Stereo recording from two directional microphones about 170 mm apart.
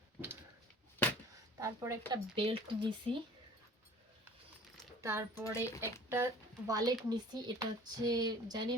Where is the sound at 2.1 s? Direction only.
30° right (ahead or behind).